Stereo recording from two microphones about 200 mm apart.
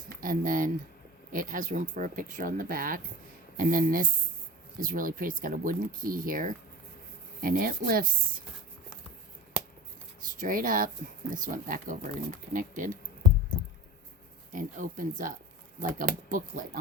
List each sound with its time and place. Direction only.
0.1 s speech: 45° right (ahead or behind)
10.4 s speech: 45° right (ahead or behind)
14.5 s speech: 40° right (ahead or behind)
16.3 s speech: 45° right (ahead or behind)